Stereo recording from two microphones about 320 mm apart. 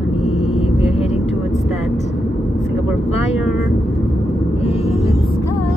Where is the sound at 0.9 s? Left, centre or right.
Centre.